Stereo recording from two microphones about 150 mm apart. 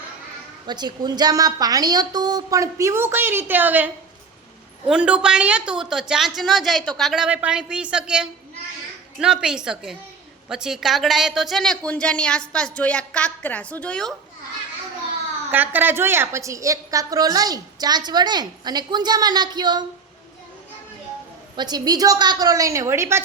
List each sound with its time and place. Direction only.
0.7 s a woman's voice: 30° right (ahead or behind); by 14.1 s 5° left (ahead or behind)
15.4 s a woman's voice: 15° right (ahead or behind); by 19.8 s 30° right (ahead or behind)
21.5 s a woman's voice: 30° right (ahead or behind)